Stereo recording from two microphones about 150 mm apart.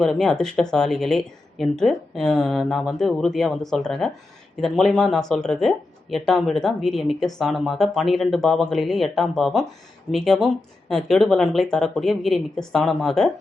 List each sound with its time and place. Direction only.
0.0 s a woman's voice: 5° left (ahead or behind)